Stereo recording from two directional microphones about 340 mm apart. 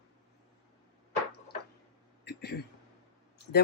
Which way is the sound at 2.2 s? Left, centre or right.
Left.